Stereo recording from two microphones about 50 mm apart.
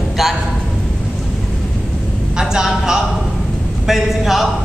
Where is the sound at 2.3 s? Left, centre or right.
Centre.